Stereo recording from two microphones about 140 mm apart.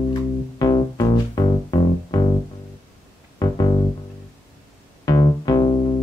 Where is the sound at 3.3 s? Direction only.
30° left (ahead or behind).